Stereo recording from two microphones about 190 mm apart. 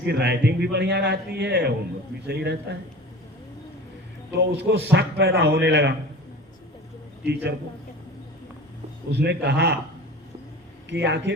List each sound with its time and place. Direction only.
0.0 s a man's voice: 60° right (ahead or behind)
4.5 s a man's voice: 60° right (ahead or behind)
7.3 s a man's voice: 60° right (ahead or behind)
9.1 s a man's voice: 60° right (ahead or behind)
10.8 s a man's voice: 65° right (ahead or behind)